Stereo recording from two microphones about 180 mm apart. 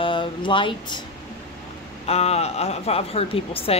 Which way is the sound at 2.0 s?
35° left (ahead or behind).